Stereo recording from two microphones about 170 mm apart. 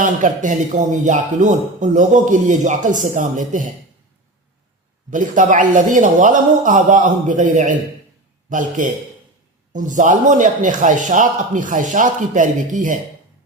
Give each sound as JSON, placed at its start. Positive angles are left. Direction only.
{"t": 0.0, "sound": "a man's voice", "side_deg": -50}
{"t": 5.1, "sound": "a man's voice", "side_deg": -50}